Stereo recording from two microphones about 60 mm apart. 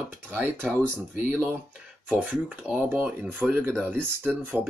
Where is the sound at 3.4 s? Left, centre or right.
Centre.